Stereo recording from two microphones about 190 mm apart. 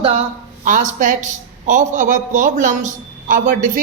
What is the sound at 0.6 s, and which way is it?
A man's voice, 45° right (ahead or behind).